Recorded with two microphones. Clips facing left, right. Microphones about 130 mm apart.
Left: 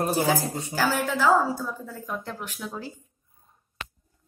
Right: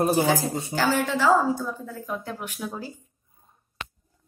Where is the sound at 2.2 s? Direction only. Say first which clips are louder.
Right 2 dB; 10° right (ahead or behind).